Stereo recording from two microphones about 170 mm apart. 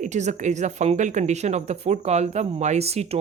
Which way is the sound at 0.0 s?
45° right (ahead or behind).